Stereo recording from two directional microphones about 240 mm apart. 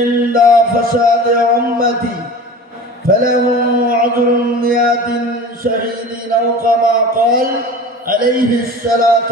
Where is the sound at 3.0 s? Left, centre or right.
Right.